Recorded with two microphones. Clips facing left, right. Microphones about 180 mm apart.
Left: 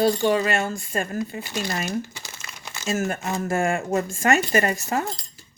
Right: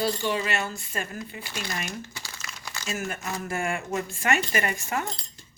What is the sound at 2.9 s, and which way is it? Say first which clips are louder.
Speech: left 7 dB; 45° left (ahead or behind).